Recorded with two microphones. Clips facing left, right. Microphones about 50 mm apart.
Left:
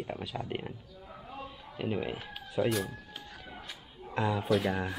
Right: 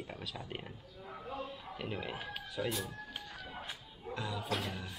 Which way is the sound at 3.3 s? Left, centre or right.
Centre.